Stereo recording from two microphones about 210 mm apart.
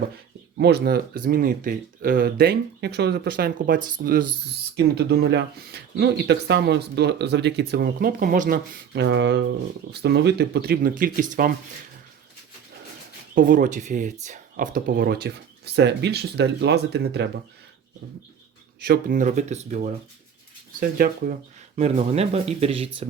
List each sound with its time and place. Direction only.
0.6 s speech: 50° right (ahead or behind)
4.8 s speech: 55° right (ahead or behind)
13.3 s speech: 40° right (ahead or behind)
18.8 s speech: 45° right (ahead or behind)
21.8 s speech: 30° right (ahead or behind)